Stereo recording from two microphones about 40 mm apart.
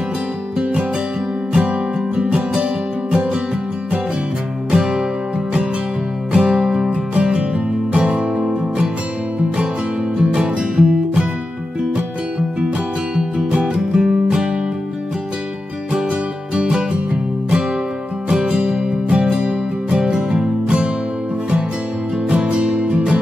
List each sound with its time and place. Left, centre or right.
1.6 s music: right
4.6 s music: centre
6.3 s music: right
6.6 s music: centre
6.9 s music: right
10.1 s music: right
13.5 s music: right
16.5 s music: right
22.3 s music: right